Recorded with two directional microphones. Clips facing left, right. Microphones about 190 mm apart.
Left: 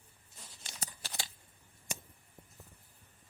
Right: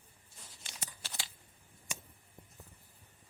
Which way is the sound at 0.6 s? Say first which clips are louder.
Left 2 dB; 40° left (ahead or behind).